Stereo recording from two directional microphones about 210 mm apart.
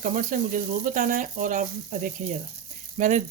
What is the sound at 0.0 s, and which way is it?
Speech, 40° right (ahead or behind).